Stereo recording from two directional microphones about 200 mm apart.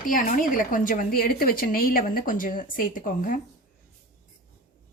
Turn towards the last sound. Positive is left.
turn(degrees=45)  # may be behind; listen again after turning